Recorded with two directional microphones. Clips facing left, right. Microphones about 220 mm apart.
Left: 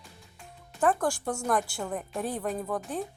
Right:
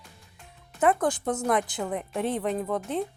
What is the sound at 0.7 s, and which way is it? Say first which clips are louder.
Speech: right 3 dB; 20° right (ahead or behind).